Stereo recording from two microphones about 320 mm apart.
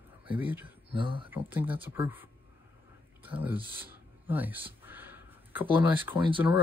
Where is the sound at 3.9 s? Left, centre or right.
Centre.